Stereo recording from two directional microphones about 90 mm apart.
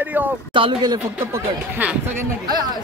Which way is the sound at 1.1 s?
25° right (ahead or behind).